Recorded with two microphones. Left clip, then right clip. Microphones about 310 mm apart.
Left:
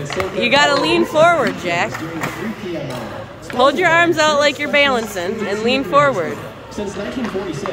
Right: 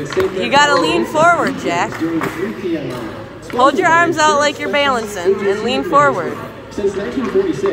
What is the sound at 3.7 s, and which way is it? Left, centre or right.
A woman's voice, centre.